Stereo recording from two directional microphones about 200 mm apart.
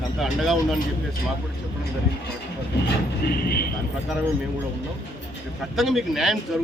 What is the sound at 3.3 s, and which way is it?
Speech, 50° left (ahead or behind).